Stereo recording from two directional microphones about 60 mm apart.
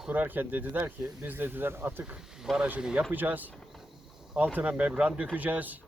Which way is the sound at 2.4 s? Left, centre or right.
Centre.